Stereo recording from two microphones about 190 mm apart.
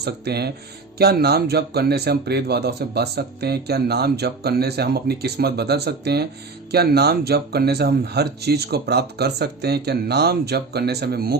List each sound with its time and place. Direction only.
0.0 s speech: 60° right (ahead or behind)